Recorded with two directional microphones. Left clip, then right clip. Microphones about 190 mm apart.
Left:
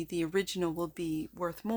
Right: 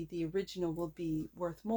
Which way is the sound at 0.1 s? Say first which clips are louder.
Left 5 dB; 45° left (ahead or behind).